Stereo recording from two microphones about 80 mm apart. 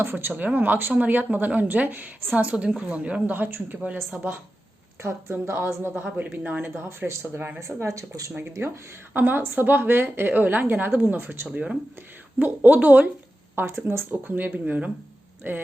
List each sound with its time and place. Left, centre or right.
0.0 s a woman's voice: right
5.0 s speech: right
5.9 s speech: right
8.4 s speech: right
11.5 s a woman's voice: centre
13.6 s speech: right